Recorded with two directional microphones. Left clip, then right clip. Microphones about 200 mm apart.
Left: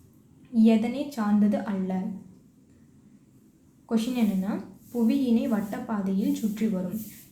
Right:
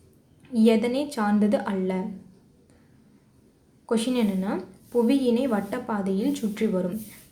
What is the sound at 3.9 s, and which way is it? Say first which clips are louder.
A woman's voice: right 3 dB; 25° right (ahead or behind).